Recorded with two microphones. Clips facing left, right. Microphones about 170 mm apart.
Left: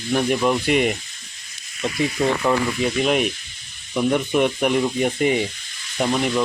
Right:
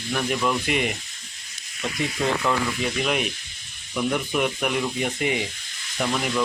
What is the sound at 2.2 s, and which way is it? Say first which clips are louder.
Speech: left 4 dB; 15° left (ahead or behind).